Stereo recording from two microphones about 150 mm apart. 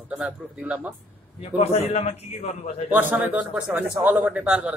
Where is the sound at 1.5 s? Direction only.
45° left (ahead or behind).